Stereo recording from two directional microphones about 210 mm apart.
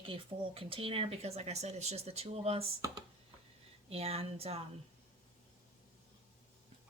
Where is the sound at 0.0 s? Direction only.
25° right (ahead or behind).